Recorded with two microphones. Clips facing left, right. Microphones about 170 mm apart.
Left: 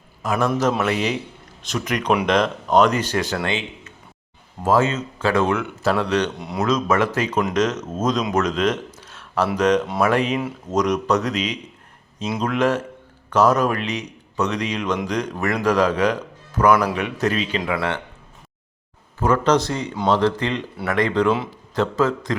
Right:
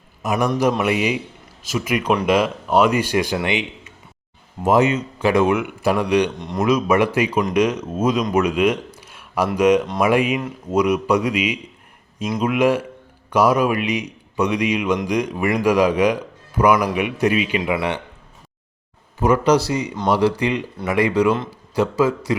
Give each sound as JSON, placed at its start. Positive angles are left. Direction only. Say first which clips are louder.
{"t": 0.2, "sound": "speech", "louder": "right 1 dB", "side_deg": -15}
{"t": 8.3, "sound": "a sound", "louder": "right 3 dB", "side_deg": -10}
{"t": 9.6, "sound": "speech", "louder": "right 3 dB", "side_deg": -10}
{"t": 19.2, "sound": "speech", "louder": "right 2 dB", "side_deg": -10}